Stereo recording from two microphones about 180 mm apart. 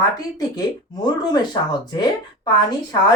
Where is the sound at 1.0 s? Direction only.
25° left (ahead or behind).